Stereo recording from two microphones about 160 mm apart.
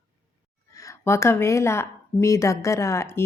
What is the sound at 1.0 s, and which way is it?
Speech, 15° left (ahead or behind).